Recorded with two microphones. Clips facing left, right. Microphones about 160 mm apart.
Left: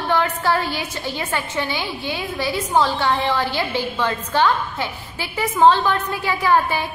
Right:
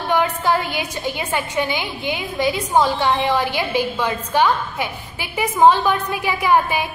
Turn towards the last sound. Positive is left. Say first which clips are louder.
# right 1 dB
turn(degrees=-15)  # may be behind; listen again after turning